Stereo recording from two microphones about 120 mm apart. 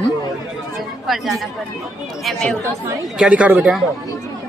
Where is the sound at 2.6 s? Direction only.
25° right (ahead or behind).